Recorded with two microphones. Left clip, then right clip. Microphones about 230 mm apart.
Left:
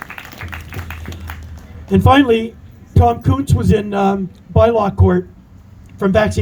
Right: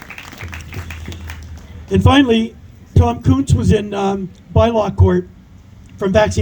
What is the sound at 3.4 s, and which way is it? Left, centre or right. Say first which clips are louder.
Music: even; right.